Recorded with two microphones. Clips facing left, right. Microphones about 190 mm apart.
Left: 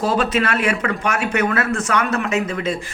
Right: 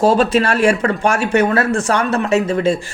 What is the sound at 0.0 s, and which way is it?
Speech, 30° right (ahead or behind).